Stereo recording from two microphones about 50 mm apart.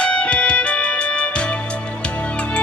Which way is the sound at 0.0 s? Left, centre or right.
Left.